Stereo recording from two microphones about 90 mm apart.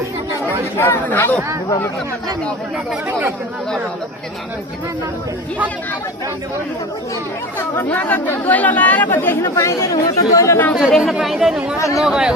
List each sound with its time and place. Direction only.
0.4 s speech: 25° left (ahead or behind)
3.1 s speech: 25° right (ahead or behind)
7.6 s speech: 20° left (ahead or behind); by 10.6 s 35° left (ahead or behind)
10.8 s speech: centre (ahead or behind)